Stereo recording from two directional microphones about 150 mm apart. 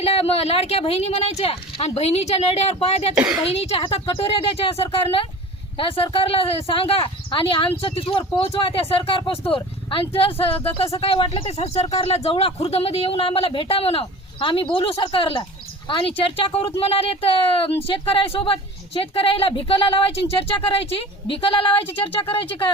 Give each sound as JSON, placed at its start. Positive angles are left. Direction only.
{"t": 0.0, "sound": "speech", "side_deg": 40}
{"t": 3.2, "sound": "a woman's voice", "side_deg": -10}
{"t": 3.5, "sound": "speech", "side_deg": 40}